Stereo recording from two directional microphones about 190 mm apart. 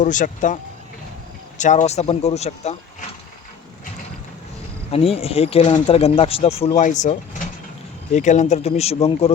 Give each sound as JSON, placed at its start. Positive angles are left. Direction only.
{"t": 0.0, "sound": "speech", "side_deg": 40}
{"t": 4.9, "sound": "speech", "side_deg": 30}